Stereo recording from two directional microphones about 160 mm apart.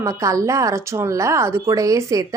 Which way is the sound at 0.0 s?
20° right (ahead or behind).